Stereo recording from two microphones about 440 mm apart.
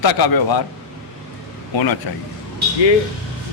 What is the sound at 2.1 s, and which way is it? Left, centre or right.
Speech, left.